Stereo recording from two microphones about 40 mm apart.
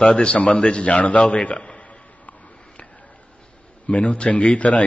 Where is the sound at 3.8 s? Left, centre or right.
Left.